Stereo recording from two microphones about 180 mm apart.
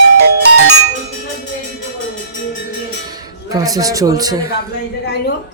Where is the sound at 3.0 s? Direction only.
20° right (ahead or behind).